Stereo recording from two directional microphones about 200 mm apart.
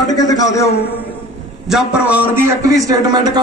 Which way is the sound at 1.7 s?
5° right (ahead or behind).